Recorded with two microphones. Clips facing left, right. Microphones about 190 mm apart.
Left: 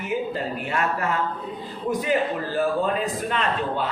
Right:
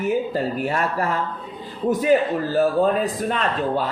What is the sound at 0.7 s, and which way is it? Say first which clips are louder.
Speech: right 2 dB; 35° right (ahead or behind).